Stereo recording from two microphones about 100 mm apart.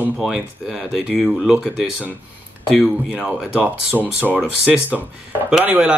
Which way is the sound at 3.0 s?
15° right (ahead or behind).